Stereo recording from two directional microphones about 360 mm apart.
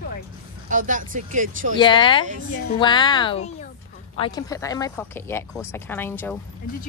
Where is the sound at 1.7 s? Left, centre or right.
Centre.